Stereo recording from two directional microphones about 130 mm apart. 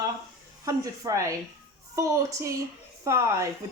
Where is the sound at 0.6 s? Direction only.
25° right (ahead or behind).